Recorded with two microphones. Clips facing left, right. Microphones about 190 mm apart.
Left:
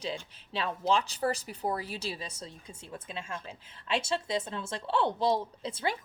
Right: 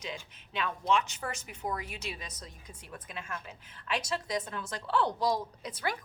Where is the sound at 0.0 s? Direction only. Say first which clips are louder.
Left 5 dB; 30° left (ahead or behind).